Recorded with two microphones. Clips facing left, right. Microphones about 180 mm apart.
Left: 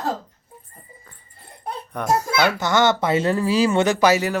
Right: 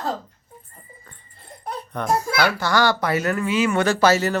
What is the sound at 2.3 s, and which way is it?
A child's voice, 20° left (ahead or behind).